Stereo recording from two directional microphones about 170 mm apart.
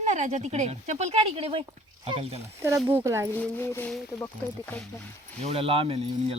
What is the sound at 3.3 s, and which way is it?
Speech, 10° left (ahead or behind).